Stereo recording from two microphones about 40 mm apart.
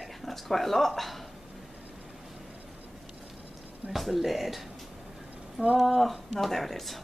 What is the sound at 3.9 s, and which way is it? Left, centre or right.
Speech, centre.